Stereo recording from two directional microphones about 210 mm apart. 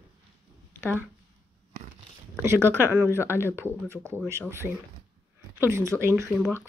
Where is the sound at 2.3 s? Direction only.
15° right (ahead or behind).